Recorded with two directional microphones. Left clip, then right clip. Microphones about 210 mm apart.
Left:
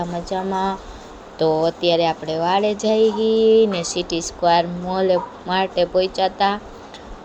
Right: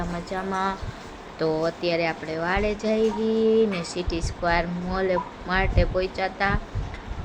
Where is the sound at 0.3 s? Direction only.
10° left (ahead or behind).